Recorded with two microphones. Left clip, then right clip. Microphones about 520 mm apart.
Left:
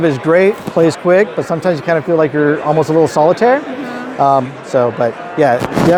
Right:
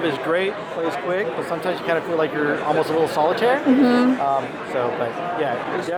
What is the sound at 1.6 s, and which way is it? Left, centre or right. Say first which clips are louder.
Speech: left 8 dB; left.